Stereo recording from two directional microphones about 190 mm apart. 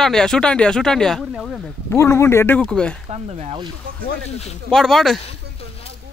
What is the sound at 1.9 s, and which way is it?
Speech, 15° left (ahead or behind).